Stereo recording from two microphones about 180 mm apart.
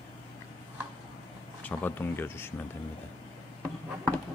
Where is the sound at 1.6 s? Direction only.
10° left (ahead or behind).